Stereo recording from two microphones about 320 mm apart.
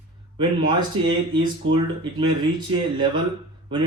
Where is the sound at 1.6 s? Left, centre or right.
Right.